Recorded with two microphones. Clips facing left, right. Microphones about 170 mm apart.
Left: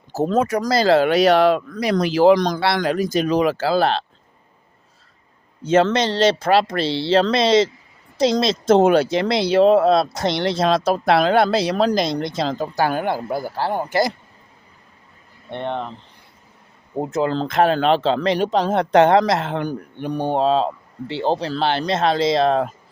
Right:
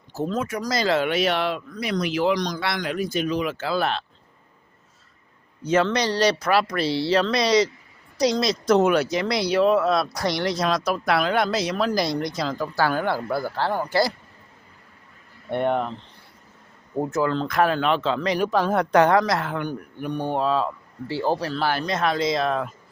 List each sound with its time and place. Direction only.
0.1 s speech: 40° left (ahead or behind)
2.3 s speech: 50° left (ahead or behind)
2.8 s speech: 40° left (ahead or behind)
5.6 s speech: 25° left (ahead or behind)
11.9 s speech: 20° left (ahead or behind)
15.4 s speech: 10° right (ahead or behind)
17.0 s speech: 20° left (ahead or behind)